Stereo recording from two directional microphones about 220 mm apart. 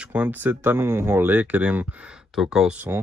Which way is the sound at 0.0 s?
5° right (ahead or behind).